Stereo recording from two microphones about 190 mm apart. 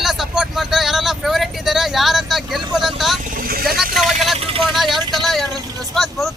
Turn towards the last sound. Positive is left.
turn(degrees=0)  # may be behind; listen again after turning